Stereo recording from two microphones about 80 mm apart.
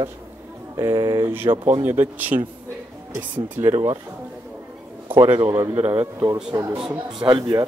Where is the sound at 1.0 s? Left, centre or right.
Right.